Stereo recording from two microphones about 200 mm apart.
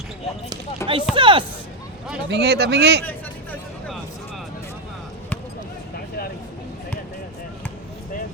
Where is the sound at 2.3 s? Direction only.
55° right (ahead or behind).